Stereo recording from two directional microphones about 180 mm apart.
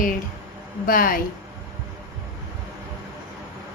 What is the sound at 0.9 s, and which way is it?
Speech, 50° left (ahead or behind).